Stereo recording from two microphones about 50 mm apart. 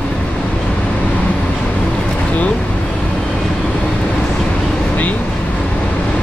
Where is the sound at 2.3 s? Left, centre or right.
Left.